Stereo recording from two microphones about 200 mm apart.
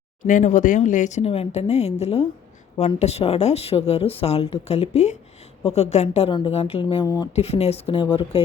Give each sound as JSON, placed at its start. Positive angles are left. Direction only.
{"t": 0.3, "sound": "a woman's voice", "side_deg": 40}